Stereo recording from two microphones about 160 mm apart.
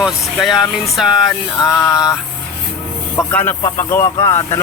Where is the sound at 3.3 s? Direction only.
10° left (ahead or behind).